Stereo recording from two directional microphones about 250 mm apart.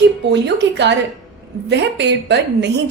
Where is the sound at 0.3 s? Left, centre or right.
Right.